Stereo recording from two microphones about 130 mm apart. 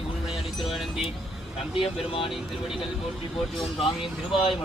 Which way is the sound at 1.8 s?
45° left (ahead or behind).